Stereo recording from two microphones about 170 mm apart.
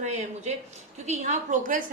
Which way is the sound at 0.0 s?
45° right (ahead or behind).